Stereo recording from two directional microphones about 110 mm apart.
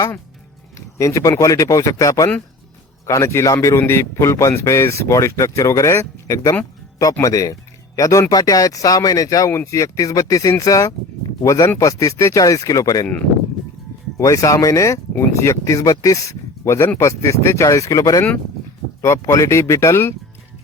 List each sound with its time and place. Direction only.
0.9 s speech: 30° left (ahead or behind)
14.2 s speech: 30° left (ahead or behind)